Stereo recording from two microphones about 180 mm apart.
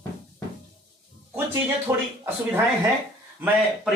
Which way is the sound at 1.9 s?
15° right (ahead or behind).